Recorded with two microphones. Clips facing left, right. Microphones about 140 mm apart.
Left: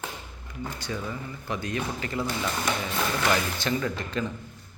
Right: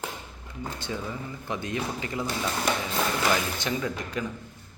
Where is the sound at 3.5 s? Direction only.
15° right (ahead or behind).